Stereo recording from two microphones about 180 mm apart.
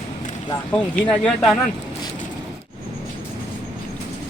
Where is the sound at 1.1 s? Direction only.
5° left (ahead or behind).